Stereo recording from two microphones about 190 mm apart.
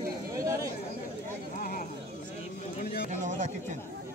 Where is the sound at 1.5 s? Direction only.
45° left (ahead or behind).